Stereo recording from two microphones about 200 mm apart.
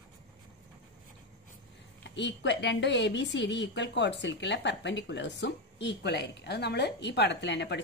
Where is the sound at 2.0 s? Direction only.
60° left (ahead or behind).